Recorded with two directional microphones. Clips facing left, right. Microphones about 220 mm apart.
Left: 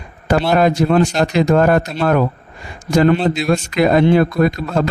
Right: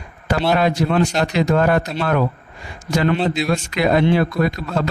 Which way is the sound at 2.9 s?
45° left (ahead or behind).